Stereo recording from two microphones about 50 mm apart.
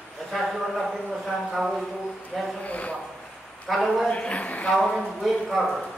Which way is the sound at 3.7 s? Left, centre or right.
Centre.